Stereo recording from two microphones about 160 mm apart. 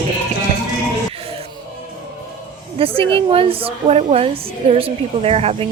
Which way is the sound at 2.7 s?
35° right (ahead or behind).